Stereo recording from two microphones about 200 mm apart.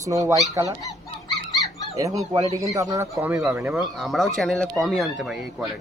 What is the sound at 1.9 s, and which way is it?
Speech, 15° right (ahead or behind).